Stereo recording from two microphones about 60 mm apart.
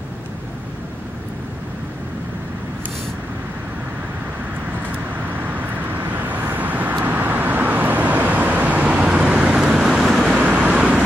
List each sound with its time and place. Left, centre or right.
4.9 s vehicle: right; by 10.2 s centre
10.2 s vehicle: right
10.7 s vehicle: centre